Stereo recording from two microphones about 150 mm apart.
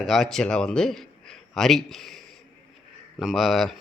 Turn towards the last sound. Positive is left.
turn(degrees=0)  # may be behind; listen again after turning